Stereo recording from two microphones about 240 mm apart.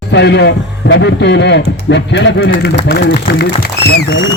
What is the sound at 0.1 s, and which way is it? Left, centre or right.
Speech, left.